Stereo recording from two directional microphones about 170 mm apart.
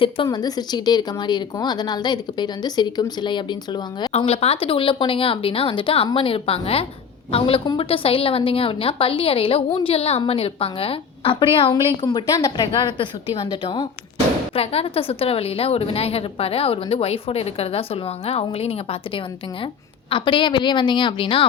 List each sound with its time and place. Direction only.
0.0 s speech: 25° left (ahead or behind)
4.2 s a woman's voice: 35° left (ahead or behind)